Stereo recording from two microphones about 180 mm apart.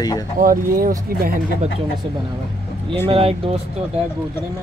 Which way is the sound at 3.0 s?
30° right (ahead or behind).